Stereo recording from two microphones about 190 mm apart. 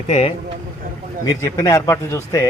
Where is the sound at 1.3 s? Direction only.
15° left (ahead or behind).